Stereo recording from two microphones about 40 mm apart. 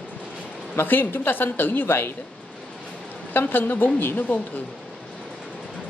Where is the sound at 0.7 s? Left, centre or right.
Left.